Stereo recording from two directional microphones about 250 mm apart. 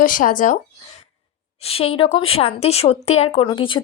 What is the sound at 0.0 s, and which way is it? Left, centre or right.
Speech, left.